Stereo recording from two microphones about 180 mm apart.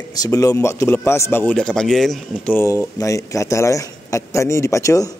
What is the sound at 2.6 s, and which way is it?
A man's voice, 15° left (ahead or behind).